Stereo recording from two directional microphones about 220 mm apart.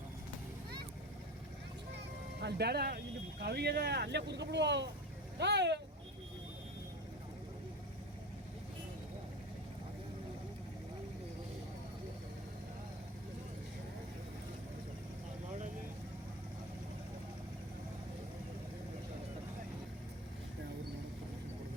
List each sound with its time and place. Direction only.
2.4 s speech: 50° right (ahead or behind)